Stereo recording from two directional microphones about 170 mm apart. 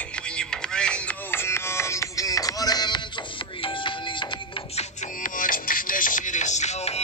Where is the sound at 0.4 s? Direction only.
5° left (ahead or behind); by 3.0 s 25° left (ahead or behind).